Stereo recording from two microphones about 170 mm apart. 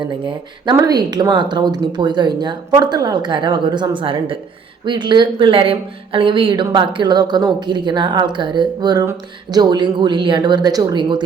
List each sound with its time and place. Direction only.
0.0 s speech: 25° right (ahead or behind)